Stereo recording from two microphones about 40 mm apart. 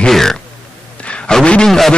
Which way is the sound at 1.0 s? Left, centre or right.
Left.